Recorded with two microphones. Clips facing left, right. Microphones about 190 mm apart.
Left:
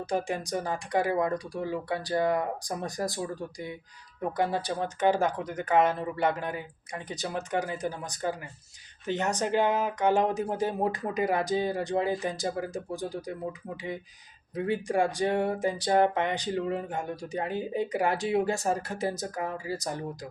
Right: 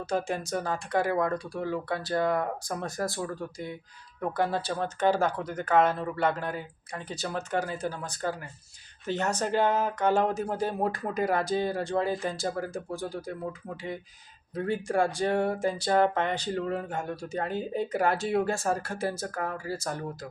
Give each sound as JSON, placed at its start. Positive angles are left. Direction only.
{"t": 0.0, "sound": "speech", "side_deg": 15}
{"t": 14.5, "sound": "speech", "side_deg": 15}